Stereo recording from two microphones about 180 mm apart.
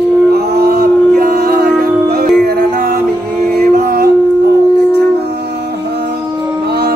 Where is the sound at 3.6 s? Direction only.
50° right (ahead or behind).